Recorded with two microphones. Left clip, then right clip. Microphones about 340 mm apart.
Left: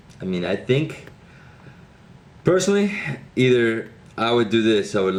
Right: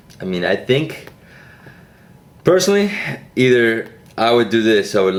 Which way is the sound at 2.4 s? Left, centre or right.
Centre.